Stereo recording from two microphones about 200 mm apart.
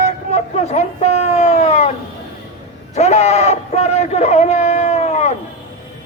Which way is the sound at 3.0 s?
35° left (ahead or behind).